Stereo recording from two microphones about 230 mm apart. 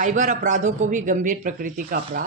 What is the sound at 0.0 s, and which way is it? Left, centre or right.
Speech, right.